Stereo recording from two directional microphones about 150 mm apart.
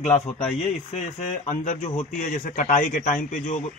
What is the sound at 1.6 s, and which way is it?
A man's voice, 60° left (ahead or behind).